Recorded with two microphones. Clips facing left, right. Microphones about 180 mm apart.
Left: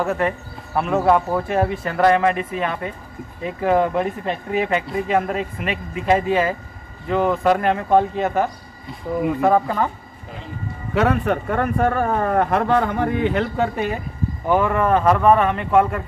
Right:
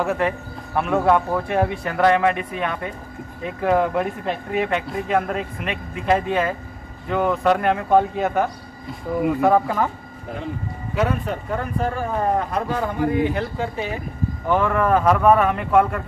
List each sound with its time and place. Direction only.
0.0 s speech: centre (ahead or behind)
11.0 s speech: 70° left (ahead or behind)
14.5 s speech: 5° left (ahead or behind)